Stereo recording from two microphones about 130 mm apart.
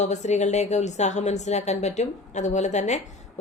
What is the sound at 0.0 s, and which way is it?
A woman's voice, 65° left (ahead or behind).